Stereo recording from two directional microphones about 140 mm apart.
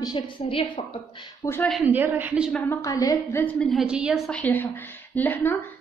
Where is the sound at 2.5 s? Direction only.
10° left (ahead or behind).